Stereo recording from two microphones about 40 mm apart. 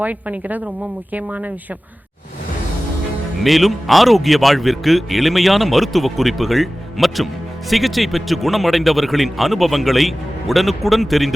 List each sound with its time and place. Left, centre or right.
0.0 s a woman's voice: right
3.4 s speech: centre